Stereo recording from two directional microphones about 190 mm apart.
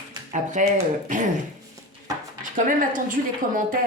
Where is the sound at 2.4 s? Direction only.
45° right (ahead or behind).